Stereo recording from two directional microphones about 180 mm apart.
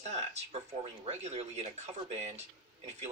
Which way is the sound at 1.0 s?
35° right (ahead or behind).